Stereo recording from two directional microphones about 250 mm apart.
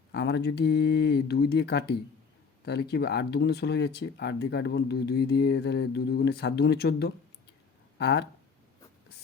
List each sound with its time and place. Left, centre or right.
0.1 s speech: left